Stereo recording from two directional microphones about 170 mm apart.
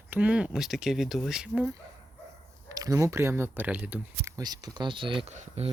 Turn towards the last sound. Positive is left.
turn(degrees=-45)  # may be behind; listen again after turning